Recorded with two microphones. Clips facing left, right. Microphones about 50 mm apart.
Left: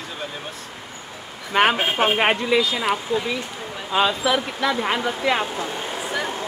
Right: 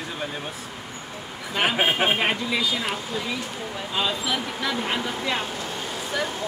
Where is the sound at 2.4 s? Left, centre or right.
Centre.